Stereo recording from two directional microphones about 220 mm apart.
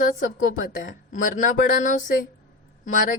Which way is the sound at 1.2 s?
35° left (ahead or behind).